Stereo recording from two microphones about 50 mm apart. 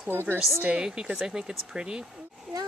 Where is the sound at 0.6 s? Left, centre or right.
Right.